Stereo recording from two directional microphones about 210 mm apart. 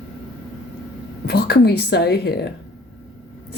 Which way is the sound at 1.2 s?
50° left (ahead or behind).